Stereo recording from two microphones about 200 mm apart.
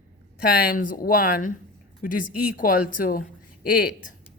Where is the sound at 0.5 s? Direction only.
50° left (ahead or behind).